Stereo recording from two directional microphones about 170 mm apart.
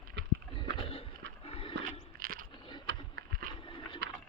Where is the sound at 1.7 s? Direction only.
60° right (ahead or behind).